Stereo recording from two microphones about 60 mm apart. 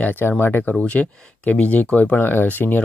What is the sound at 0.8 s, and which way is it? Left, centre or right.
Speech, left.